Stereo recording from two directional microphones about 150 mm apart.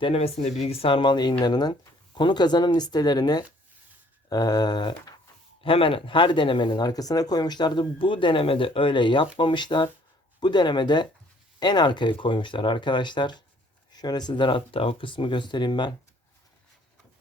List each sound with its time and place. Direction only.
0.0 s speech: 40° left (ahead or behind)